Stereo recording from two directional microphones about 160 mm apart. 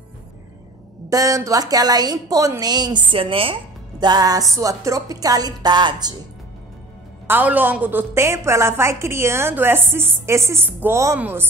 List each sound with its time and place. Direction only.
1.1 s a woman's voice: 20° right (ahead or behind)
7.2 s a woman's voice: 10° right (ahead or behind)